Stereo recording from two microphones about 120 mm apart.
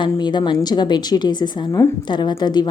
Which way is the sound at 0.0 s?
40° left (ahead or behind).